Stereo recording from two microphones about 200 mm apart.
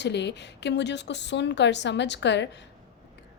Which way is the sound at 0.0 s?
60° left (ahead or behind).